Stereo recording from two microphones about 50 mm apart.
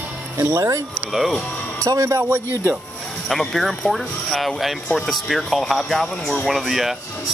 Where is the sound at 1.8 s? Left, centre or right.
Right.